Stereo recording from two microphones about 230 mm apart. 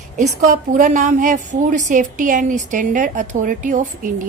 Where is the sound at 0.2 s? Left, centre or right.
Right.